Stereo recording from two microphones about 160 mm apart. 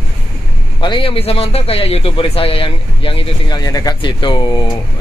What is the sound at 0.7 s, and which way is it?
A man's voice, 30° left (ahead or behind).